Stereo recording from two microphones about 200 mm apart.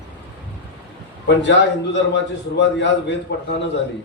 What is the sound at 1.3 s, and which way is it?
A man's voice, 60° left (ahead or behind).